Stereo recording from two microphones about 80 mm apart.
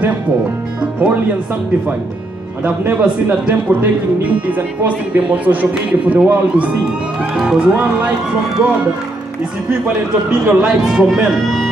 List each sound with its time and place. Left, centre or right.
2.8 s speech: centre
10.4 s speech: centre